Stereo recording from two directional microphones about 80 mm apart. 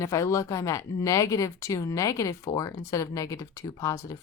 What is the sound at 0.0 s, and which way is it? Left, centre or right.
Speech, left.